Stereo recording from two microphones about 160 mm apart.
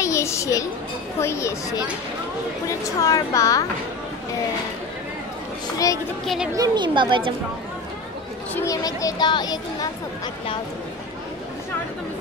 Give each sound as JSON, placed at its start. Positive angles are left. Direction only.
{"t": 0.0, "sound": "a sound", "side_deg": 20}
{"t": 1.2, "sound": "speech", "side_deg": 20}
{"t": 6.2, "sound": "speech", "side_deg": 0}
{"t": 6.5, "sound": "speech", "side_deg": -25}
{"t": 8.5, "sound": "speech", "side_deg": 20}